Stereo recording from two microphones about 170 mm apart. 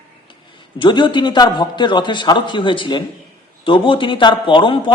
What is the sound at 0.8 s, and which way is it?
A man's voice, 30° left (ahead or behind).